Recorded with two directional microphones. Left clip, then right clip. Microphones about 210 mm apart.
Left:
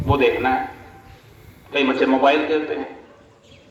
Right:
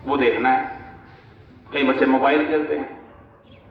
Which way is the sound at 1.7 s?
45° left (ahead or behind).